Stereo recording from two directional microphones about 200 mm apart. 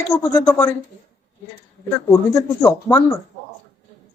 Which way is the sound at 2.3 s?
10° left (ahead or behind).